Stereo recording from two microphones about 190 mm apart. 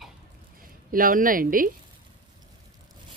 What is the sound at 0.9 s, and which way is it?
Speech, 45° right (ahead or behind).